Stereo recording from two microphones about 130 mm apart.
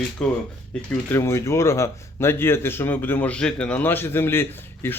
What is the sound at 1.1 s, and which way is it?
Speech, 20° left (ahead or behind).